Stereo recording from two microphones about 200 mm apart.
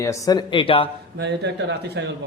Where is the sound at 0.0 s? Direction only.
15° left (ahead or behind).